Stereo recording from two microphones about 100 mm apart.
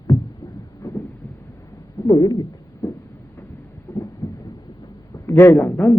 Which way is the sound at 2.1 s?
40° left (ahead or behind).